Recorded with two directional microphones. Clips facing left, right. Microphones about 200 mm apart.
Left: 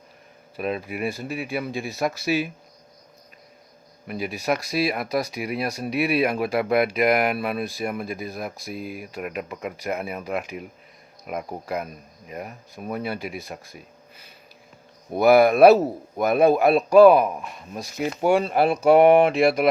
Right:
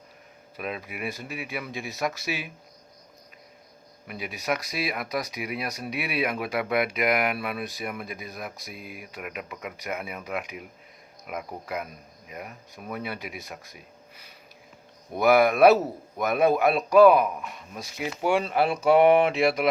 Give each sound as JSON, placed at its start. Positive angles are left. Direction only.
{"t": 0.5, "sound": "speech", "side_deg": 35}
{"t": 4.0, "sound": "speech", "side_deg": 35}
{"t": 15.2, "sound": "speech", "side_deg": 35}
{"t": 17.8, "sound": "speech", "side_deg": 45}